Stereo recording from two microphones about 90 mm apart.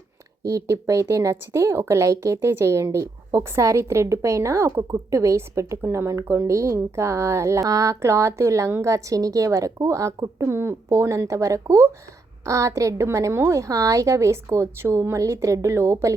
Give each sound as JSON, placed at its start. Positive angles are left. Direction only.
{"t": 0.4, "sound": "speech", "side_deg": -35}